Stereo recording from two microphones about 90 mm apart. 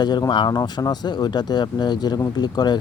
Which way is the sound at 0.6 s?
45° left (ahead or behind).